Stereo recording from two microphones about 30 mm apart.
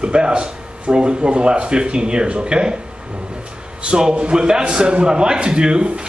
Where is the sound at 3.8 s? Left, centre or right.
Right.